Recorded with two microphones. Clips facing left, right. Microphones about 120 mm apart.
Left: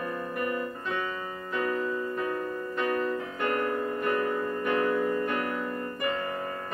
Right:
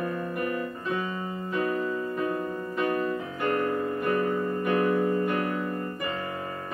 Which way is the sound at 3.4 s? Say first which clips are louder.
Right 2 dB; 35° right (ahead or behind).